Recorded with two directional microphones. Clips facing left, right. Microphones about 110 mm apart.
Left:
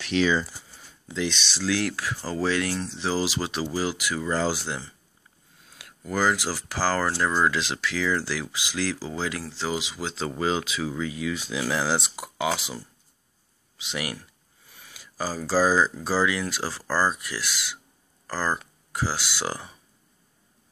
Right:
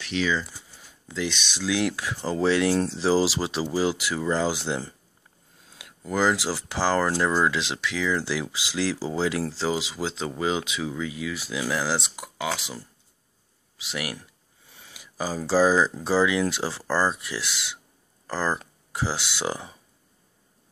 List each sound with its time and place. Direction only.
0.2 s speech: 40° left (ahead or behind)
0.7 s speech: 5° right (ahead or behind); by 10.1 s 30° right (ahead or behind)
10.4 s speech: 15° right (ahead or behind)
10.8 s speech: centre (ahead or behind)
14.7 s a sound: 25° right (ahead or behind)
15.9 s speech: 25° right (ahead or behind)
16.8 s speech: centre (ahead or behind)
17.1 s speech: 25° right (ahead or behind)